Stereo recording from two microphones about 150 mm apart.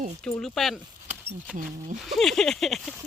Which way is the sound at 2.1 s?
Centre (ahead or behind).